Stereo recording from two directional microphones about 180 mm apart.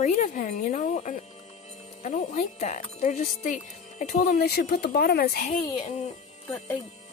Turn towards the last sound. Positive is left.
turn(degrees=10)  # may be behind; listen again after turning